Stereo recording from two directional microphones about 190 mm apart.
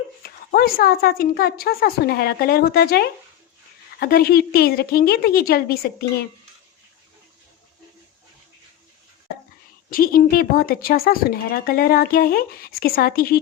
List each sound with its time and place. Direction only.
0.2 s speech: 50° left (ahead or behind)
9.9 s speech: 50° left (ahead or behind)